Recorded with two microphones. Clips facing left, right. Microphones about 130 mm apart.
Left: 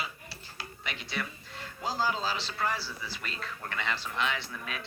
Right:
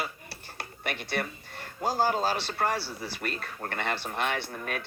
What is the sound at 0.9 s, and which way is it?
A man's voice, 55° right (ahead or behind).